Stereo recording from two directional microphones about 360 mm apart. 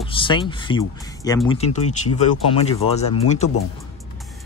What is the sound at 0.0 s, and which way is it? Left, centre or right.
Speech, centre.